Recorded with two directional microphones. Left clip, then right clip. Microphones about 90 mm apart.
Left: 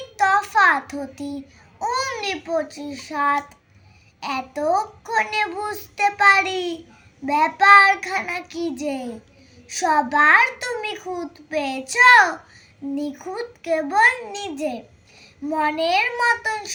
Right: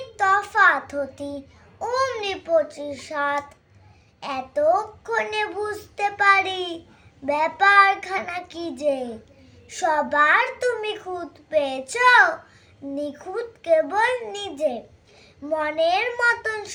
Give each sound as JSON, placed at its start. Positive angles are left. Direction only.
{"t": 0.2, "sound": "child singing", "side_deg": -40}
{"t": 1.8, "sound": "a child's voice", "side_deg": -45}